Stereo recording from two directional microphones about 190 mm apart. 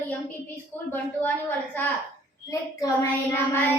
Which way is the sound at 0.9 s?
10° left (ahead or behind).